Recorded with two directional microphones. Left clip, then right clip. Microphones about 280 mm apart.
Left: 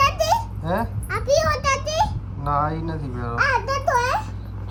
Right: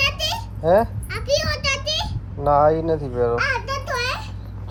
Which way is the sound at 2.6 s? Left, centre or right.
Centre.